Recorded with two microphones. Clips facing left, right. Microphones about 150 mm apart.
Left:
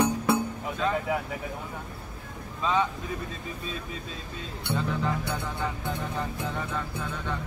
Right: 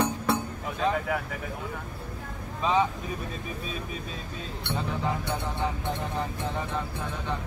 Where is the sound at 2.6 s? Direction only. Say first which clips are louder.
Right 2 dB; 15° right (ahead or behind).